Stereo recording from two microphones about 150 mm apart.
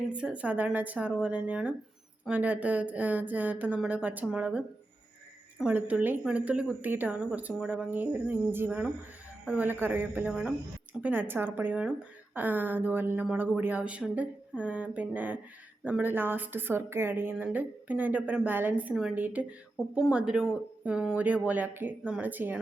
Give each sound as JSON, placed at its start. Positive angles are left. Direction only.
{"t": 0.1, "sound": "a woman's voice", "side_deg": -10}
{"t": 5.6, "sound": "a woman's voice", "side_deg": -10}